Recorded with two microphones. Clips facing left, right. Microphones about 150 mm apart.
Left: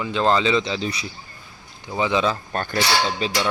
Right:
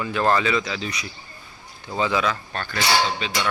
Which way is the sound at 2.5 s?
45° left (ahead or behind).